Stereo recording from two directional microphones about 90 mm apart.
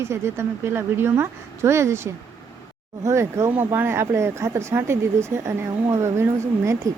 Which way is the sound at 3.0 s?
35° right (ahead or behind).